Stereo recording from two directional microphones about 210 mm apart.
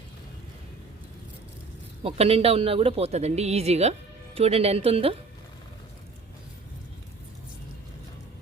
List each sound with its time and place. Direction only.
2.0 s speech: 30° right (ahead or behind)